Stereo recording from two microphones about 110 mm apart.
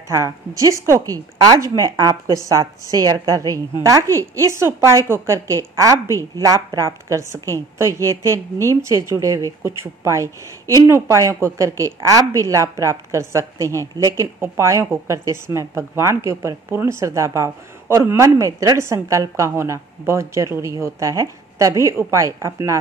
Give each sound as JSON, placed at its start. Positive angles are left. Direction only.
{"t": 0.1, "sound": "a woman's voice", "side_deg": -30}